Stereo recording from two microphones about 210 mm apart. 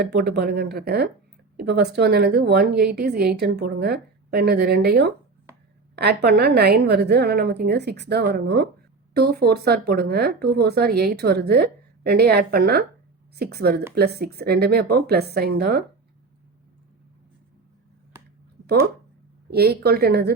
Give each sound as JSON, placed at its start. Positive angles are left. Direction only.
{"t": 0.0, "sound": "speech", "side_deg": -50}
{"t": 6.2, "sound": "speech", "side_deg": -50}
{"t": 18.6, "sound": "speech", "side_deg": -50}